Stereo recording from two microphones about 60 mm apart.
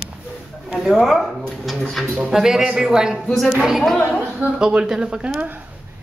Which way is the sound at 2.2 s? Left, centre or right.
Centre.